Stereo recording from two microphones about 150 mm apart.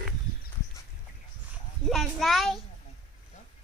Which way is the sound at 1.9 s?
Centre (ahead or behind).